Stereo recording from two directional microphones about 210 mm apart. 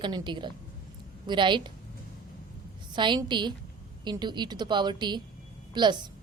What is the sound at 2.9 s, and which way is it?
A woman's voice, 20° right (ahead or behind).